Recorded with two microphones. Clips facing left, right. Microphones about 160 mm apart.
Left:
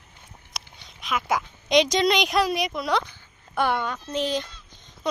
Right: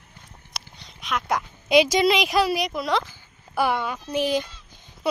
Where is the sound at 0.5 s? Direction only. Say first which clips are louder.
Right 1 dB; centre (ahead or behind).